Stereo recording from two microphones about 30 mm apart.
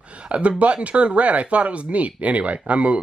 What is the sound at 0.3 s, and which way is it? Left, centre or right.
Speech, right.